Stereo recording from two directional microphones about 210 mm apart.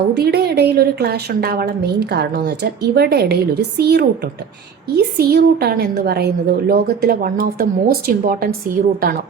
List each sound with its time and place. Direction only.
0.1 s a woman's voice: 50° right (ahead or behind)